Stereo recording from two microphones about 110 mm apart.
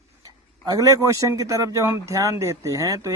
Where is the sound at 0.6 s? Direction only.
35° right (ahead or behind).